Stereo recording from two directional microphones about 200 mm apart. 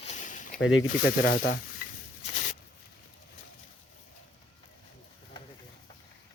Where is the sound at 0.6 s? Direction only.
75° left (ahead or behind).